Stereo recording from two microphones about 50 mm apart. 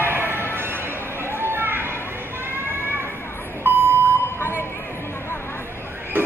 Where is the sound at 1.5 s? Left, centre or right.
Right.